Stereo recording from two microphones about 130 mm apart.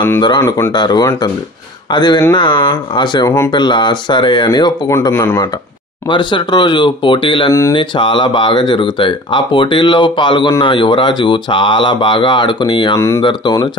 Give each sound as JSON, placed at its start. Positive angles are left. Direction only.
{"t": 0.4, "sound": "speech", "side_deg": 20}
{"t": 0.7, "sound": "speech", "side_deg": 30}
{"t": 6.0, "sound": "speech", "side_deg": 40}